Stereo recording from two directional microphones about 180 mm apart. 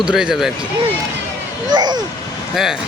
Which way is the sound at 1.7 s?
25° right (ahead or behind).